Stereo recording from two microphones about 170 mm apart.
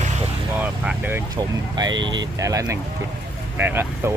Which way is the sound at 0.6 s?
10° right (ahead or behind).